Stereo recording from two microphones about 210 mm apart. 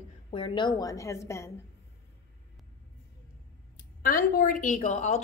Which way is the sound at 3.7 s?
40° left (ahead or behind).